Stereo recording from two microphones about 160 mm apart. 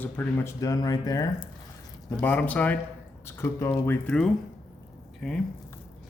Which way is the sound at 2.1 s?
10° left (ahead or behind).